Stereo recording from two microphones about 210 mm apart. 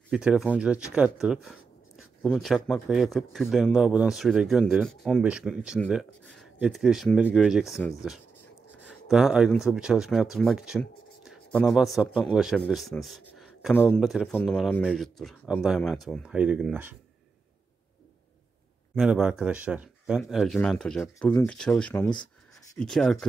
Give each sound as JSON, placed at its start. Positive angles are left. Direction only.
{"t": 0.1, "sound": "speech", "side_deg": -5}
{"t": 8.8, "sound": "a man's voice", "side_deg": 0}
{"t": 18.9, "sound": "speech", "side_deg": -5}